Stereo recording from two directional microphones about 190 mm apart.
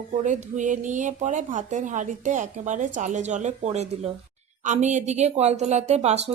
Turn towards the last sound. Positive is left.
turn(degrees=-35)  # may be behind; listen again after turning